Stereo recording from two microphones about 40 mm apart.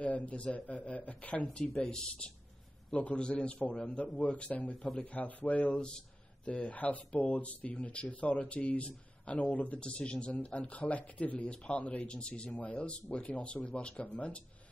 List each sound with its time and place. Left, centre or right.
0.0 s speech: left
2.9 s a man's voice: left
5.1 s speech: left
5.8 s speech: centre
6.4 s speech: left
12.1 s speech: left